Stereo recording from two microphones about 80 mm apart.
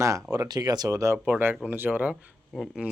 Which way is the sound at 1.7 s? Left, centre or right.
Right.